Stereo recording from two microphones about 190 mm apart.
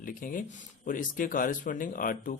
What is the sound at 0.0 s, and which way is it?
A man's voice, 45° left (ahead or behind).